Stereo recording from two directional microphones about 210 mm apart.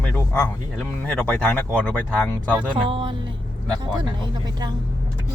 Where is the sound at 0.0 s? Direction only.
5° left (ahead or behind).